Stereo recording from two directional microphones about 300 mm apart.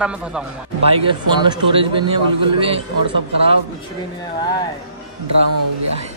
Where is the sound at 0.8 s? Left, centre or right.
Centre.